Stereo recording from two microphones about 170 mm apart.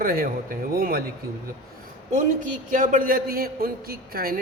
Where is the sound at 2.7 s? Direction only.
50° right (ahead or behind).